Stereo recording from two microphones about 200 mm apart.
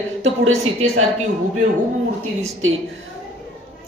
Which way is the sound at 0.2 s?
85° right.